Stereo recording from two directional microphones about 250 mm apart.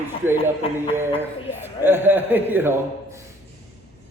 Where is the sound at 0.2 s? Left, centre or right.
Centre.